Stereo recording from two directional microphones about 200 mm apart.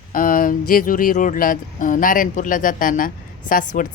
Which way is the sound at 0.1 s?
45° left (ahead or behind).